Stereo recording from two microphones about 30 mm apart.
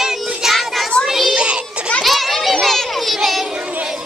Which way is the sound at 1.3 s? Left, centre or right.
Right.